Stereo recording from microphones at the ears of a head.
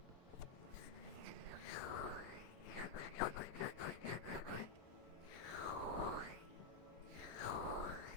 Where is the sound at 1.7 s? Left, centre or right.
Left.